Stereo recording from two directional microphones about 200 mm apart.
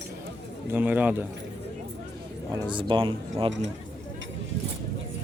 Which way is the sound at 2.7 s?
25° right (ahead or behind).